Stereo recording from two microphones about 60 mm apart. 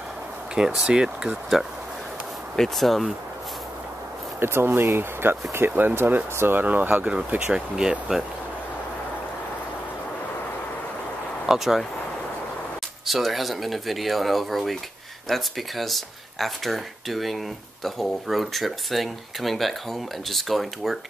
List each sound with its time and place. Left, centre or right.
0.6 s speech: centre
2.5 s speech: centre
4.4 s speech: right
7.3 s speech: centre
11.4 s speech: centre
13.0 s speech: centre